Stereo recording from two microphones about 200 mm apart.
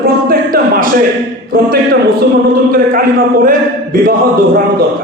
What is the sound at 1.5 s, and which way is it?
Speech, 45° right (ahead or behind).